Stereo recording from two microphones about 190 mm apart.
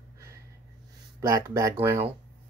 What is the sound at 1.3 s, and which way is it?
Speech, 15° right (ahead or behind).